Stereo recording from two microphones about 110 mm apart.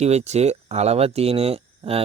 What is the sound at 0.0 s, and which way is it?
Speech, 85° right.